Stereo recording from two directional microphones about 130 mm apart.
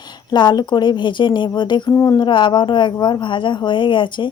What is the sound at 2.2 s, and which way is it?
Speech, 40° left (ahead or behind).